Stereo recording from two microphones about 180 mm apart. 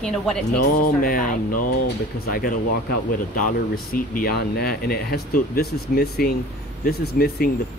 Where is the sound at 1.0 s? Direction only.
50° left (ahead or behind).